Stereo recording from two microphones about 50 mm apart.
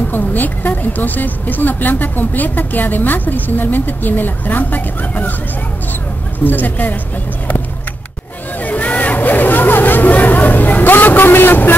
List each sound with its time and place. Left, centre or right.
0.1 s a woman's voice: left
6.4 s a woman's voice: left
8.6 s vehicle: left